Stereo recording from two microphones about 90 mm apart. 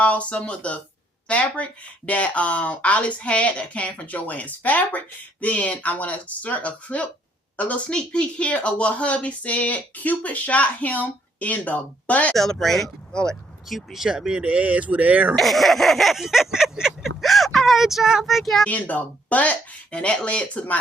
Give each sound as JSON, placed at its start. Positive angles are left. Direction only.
{"t": 0.0, "sound": "speech", "side_deg": 15}
{"t": 12.3, "sound": "speech", "side_deg": 5}
{"t": 15.4, "sound": "speech", "side_deg": 0}
{"t": 18.7, "sound": "speech", "side_deg": 15}